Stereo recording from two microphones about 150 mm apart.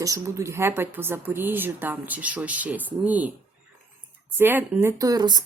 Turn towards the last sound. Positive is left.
turn(degrees=-30)  # may be behind; listen again after turning